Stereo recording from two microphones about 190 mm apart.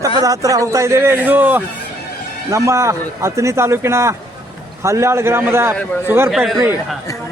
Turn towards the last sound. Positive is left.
turn(degrees=0)  # may be behind; listen again after turning